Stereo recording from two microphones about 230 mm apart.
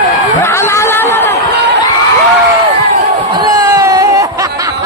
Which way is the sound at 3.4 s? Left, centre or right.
Centre.